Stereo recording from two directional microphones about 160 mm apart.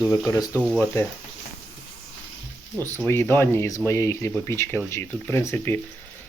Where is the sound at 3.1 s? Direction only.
15° left (ahead or behind).